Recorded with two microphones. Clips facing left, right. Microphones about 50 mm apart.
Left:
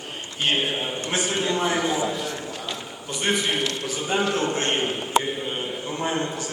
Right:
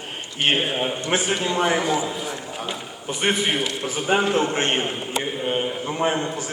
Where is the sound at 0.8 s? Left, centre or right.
Right.